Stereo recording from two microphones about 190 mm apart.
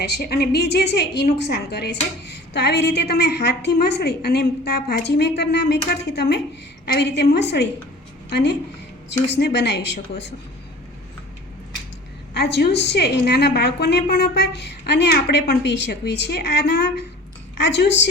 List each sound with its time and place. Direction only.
0.1 s a woman's voice: 55° left (ahead or behind)
12.3 s a woman's voice: 60° left (ahead or behind)